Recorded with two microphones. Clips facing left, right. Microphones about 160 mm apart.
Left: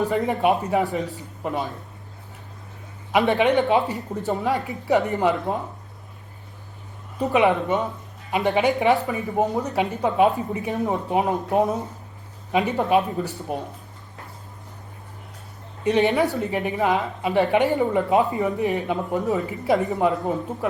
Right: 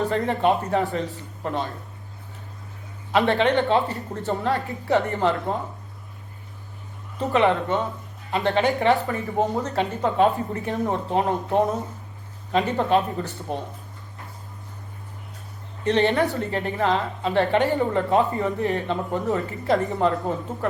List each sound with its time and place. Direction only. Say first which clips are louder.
0.0 s speech: left 1 dB; 10° left (ahead or behind)
3.1 s speech: left 1 dB; 10° left (ahead or behind)
7.2 s speech: left 1 dB; 15° left (ahead or behind)
15.8 s speech: left 1 dB; 10° left (ahead or behind)
19.2 s a woman's voice: left 1 dB; centre (ahead or behind)